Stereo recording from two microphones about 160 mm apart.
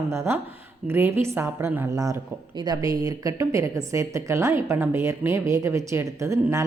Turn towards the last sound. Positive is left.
turn(degrees=-20)  # may be behind; listen again after turning